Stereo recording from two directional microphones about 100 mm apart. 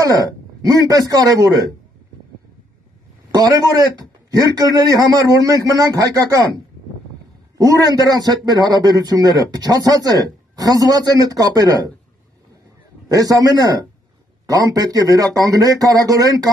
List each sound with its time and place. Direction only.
0.0 s a man's voice: 35° right (ahead or behind)
3.3 s a man's voice: 40° right (ahead or behind)
13.1 s a man's voice: 35° right (ahead or behind)